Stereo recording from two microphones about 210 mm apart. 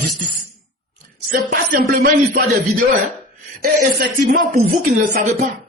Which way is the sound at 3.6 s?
45° right (ahead or behind).